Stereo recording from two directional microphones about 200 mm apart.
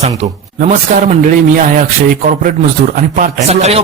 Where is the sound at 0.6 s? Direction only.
40° right (ahead or behind).